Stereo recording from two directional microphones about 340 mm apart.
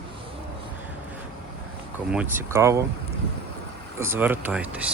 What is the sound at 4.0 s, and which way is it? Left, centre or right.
Speech, centre.